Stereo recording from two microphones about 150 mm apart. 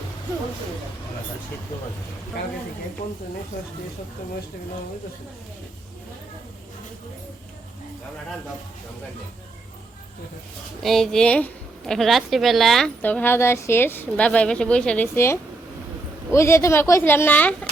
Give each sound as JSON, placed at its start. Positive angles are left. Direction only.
{"t": 10.8, "sound": "a woman's voice", "side_deg": 0}
{"t": 13.0, "sound": "speech", "side_deg": 10}